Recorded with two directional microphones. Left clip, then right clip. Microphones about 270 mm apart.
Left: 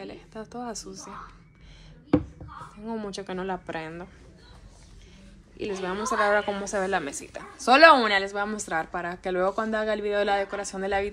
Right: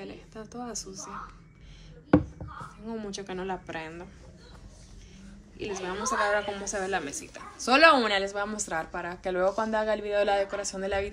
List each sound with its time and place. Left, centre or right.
0.0 s a woman's voice: centre
2.8 s a woman's voice: centre
5.6 s a woman's voice: centre